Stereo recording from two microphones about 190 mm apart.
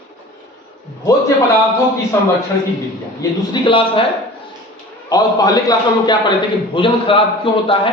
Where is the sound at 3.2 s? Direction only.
25° left (ahead or behind).